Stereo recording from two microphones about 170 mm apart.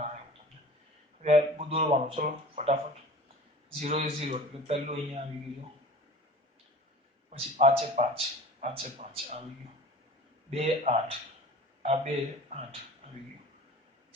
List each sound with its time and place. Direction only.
1.2 s a man's voice: 40° right (ahead or behind)
2.1 s speech: 45° right (ahead or behind)
3.8 s a man's voice: 35° right (ahead or behind)
7.3 s a man's voice: 45° right (ahead or behind)
10.5 s a man's voice: 40° right (ahead or behind)